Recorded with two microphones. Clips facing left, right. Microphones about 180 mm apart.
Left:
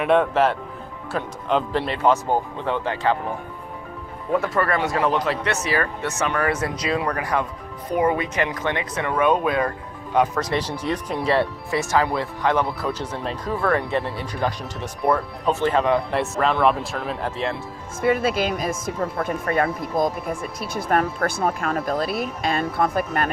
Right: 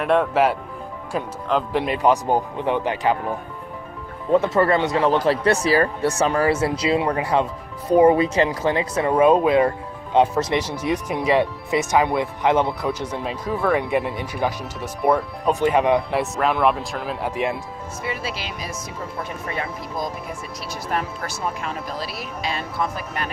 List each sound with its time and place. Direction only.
0.0 s speech: centre (ahead or behind); by 3.2 s 15° right (ahead or behind)
4.3 s speech: 20° right (ahead or behind)
10.8 s speech: 15° right (ahead or behind)
16.1 s speech: centre (ahead or behind)
17.3 s speech: 15° right (ahead or behind)
18.0 s speech: 50° left (ahead or behind)